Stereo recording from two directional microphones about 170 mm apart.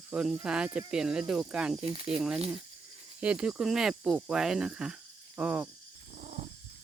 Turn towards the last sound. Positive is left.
turn(degrees=-45)  # may be behind; listen again after turning